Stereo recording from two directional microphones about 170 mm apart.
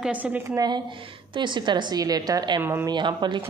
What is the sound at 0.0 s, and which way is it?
A woman's voice, 10° right (ahead or behind).